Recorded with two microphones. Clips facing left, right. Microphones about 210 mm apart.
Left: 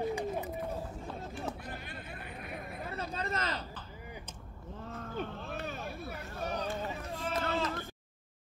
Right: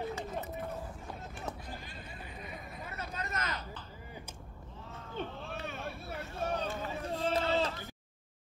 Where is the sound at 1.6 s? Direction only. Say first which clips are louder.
Left 2 dB; 60° left (ahead or behind).